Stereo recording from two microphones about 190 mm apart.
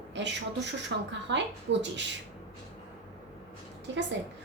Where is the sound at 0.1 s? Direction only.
70° right (ahead or behind).